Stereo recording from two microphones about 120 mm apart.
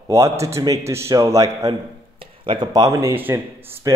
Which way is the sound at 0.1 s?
25° right (ahead or behind).